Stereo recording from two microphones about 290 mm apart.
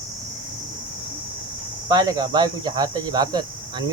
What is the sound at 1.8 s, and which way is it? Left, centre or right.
Speech, centre.